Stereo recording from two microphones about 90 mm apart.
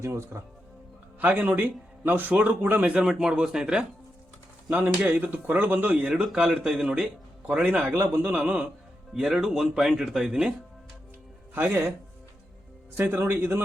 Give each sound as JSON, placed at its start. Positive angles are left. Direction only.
{"t": 0.0, "sound": "speech", "side_deg": -30}
{"t": 1.2, "sound": "a man's voice", "side_deg": -20}
{"t": 2.9, "sound": "speech", "side_deg": -10}
{"t": 4.7, "sound": "a man's voice", "side_deg": -20}
{"t": 11.5, "sound": "a man's voice", "side_deg": -25}
{"t": 13.0, "sound": "a man's voice", "side_deg": -25}